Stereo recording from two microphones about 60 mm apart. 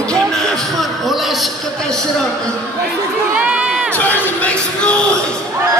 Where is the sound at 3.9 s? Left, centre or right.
Left.